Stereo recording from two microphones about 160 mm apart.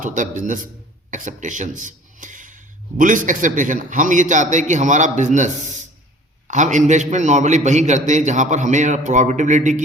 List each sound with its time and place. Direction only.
0.0 s a man's voice: 55° right (ahead or behind)